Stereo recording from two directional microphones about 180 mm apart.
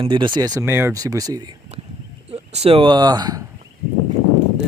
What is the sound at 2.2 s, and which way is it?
Speech, 35° right (ahead or behind).